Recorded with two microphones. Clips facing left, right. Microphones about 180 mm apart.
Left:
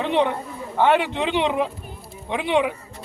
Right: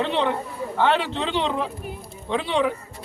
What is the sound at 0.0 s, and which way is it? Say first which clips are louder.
A man's voice: left 2 dB; 15° left (ahead or behind).